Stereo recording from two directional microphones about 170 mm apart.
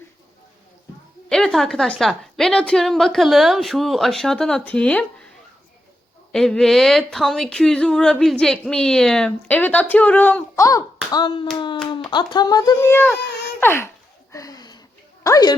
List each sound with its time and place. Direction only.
1.3 s a woman's voice: 5° left (ahead or behind)
6.3 s a woman's voice: 5° left (ahead or behind)
9.9 s a sound: 10° left (ahead or behind); by 11.4 s 30° left (ahead or behind)
11.5 s speech: 30° left (ahead or behind)
13.6 s a sound: 15° left (ahead or behind)
15.2 s speech: 20° left (ahead or behind)